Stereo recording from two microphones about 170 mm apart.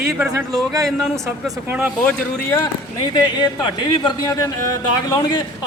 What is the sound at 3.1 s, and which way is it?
Speech, 30° left (ahead or behind).